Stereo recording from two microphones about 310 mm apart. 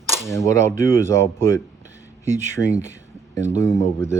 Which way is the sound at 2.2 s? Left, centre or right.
Right.